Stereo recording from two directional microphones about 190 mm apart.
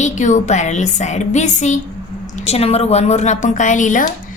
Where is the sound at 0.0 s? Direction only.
40° left (ahead or behind).